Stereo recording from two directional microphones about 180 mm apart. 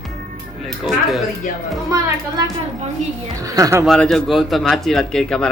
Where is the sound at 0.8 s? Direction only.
Centre (ahead or behind).